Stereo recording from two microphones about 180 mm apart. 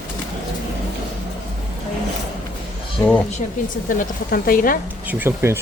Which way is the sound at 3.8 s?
50° left (ahead or behind).